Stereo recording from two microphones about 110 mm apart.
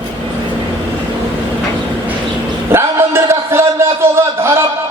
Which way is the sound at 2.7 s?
20° right (ahead or behind).